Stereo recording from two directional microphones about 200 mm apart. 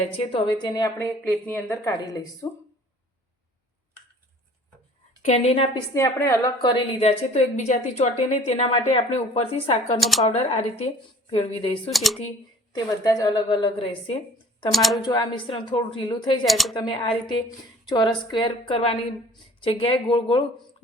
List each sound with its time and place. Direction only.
0.1 s speech: 25° left (ahead or behind)
1.2 s a woman's voice: 10° left (ahead or behind)
5.2 s speech: 30° left (ahead or behind)
5.9 s a woman's voice: 15° left (ahead or behind); by 10.0 s 30° left (ahead or behind)
10.0 s speech: centre (ahead or behind)
10.2 s a woman's voice: 30° left (ahead or behind)
11.9 s speech: centre (ahead or behind)
13.1 s speech: 20° left (ahead or behind)
14.7 s speech: centre (ahead or behind)
15.0 s speech: 20° left (ahead or behind)
16.5 s speech: centre (ahead or behind)
16.7 s speech: 25° left (ahead or behind)